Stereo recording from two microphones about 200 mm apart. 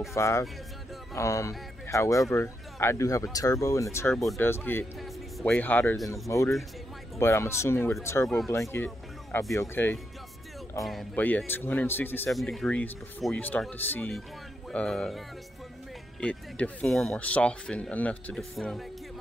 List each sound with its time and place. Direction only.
0.1 s speech: 15° left (ahead or behind)